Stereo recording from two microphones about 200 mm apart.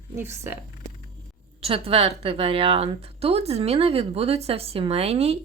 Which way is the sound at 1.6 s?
30° right (ahead or behind).